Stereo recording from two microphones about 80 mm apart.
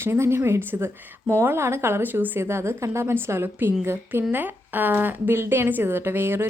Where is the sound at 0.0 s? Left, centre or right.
Right.